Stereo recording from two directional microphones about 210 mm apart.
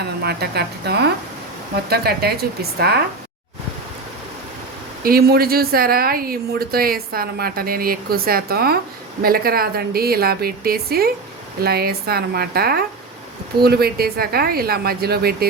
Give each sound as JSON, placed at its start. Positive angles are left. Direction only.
{"t": 0.0, "sound": "a woman's voice", "side_deg": -50}
{"t": 5.0, "sound": "a woman's voice", "side_deg": -45}